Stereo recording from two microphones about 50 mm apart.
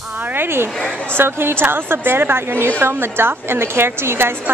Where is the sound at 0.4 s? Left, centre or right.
Right.